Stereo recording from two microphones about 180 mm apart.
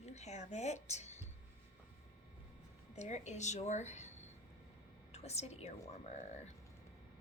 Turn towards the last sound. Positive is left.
turn(degrees=40)  # may be behind; listen again after turning